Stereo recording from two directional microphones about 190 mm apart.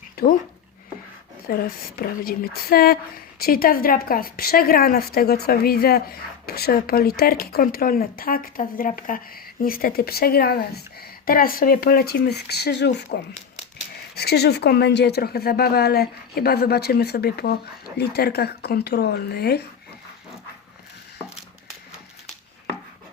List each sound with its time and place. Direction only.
1.5 s a woman's voice: 50° left (ahead or behind)
14.2 s a woman's voice: 60° left (ahead or behind)